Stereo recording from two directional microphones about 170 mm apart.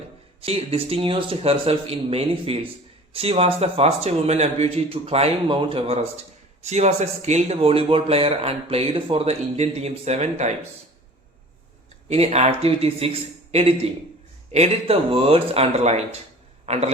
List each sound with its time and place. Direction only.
0.4 s speech: 35° right (ahead or behind)
12.0 s a man's voice: 40° right (ahead or behind)